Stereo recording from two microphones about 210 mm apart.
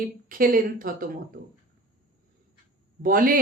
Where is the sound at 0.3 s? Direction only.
40° right (ahead or behind).